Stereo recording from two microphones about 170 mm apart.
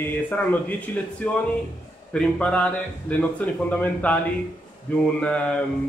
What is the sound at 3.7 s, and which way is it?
Speech, 10° left (ahead or behind).